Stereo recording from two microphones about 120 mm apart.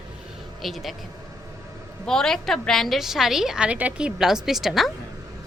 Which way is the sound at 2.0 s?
5° left (ahead or behind).